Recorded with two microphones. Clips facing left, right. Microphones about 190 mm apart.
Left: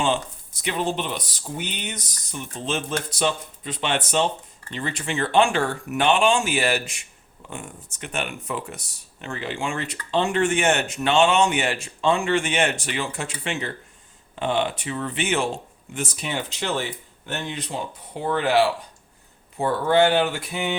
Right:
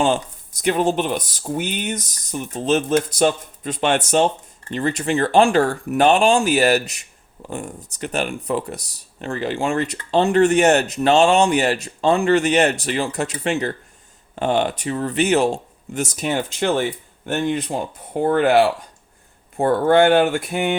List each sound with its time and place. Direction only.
0.6 s speech: 45° right (ahead or behind)